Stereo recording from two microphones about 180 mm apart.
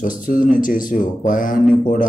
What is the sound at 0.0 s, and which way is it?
Speech, 50° left (ahead or behind).